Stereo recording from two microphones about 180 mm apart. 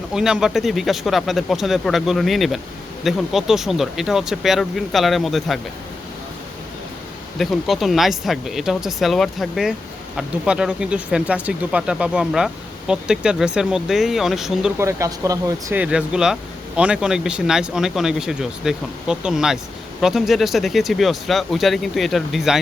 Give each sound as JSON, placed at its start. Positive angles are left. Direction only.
{"t": 0.1, "sound": "speech", "side_deg": -5}
{"t": 7.3, "sound": "speech", "side_deg": 0}
{"t": 14.8, "sound": "speech", "side_deg": -15}
{"t": 15.8, "sound": "speech", "side_deg": -5}